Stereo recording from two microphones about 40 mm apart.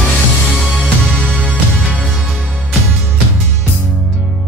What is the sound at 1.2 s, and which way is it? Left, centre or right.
Music, left.